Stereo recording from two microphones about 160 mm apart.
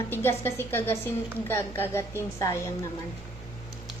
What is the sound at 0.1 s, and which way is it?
A woman's voice, 15° left (ahead or behind).